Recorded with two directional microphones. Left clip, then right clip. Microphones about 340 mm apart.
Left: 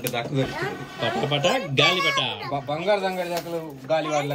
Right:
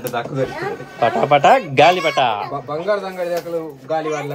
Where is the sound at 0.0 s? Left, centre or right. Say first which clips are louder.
Right 5 dB; centre.